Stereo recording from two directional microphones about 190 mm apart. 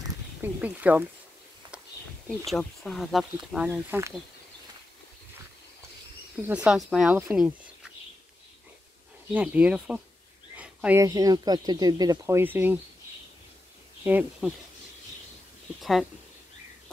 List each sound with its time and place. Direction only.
0.0 s a sound: 10° right (ahead or behind)
2.2 s speech: centre (ahead or behind)
6.4 s speech: 5° right (ahead or behind)
9.3 s speech: 10° right (ahead or behind)
10.5 s a sound: 5° right (ahead or behind)
11.1 s speech: 20° right (ahead or behind)
14.0 s speech: 10° right (ahead or behind)
15.8 s speech: centre (ahead or behind)